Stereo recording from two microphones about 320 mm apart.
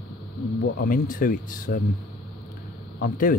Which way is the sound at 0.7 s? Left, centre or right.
Left.